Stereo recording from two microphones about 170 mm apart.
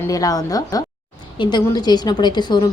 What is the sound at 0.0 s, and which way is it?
A woman's voice, 20° left (ahead or behind).